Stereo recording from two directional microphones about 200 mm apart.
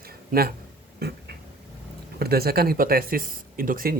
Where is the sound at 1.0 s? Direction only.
50° right (ahead or behind).